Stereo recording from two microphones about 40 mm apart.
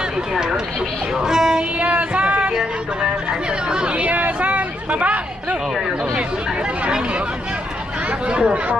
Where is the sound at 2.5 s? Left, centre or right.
Centre; by 5.6 s right.